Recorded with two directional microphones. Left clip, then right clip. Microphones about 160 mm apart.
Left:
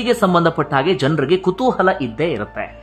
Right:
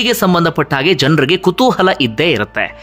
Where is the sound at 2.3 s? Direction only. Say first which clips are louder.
Right 8 dB; 20° right (ahead or behind).